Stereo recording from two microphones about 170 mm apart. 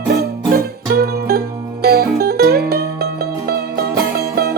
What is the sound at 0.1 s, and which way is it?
Music, 70° right (ahead or behind).